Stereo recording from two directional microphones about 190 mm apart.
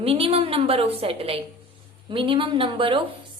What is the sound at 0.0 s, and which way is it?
A woman's voice, 30° right (ahead or behind).